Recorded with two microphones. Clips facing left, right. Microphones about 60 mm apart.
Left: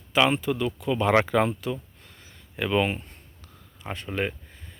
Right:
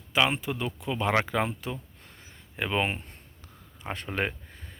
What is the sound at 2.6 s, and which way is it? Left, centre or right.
Speech, right.